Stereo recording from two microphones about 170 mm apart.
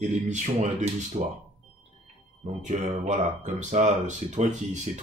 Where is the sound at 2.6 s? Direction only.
45° right (ahead or behind).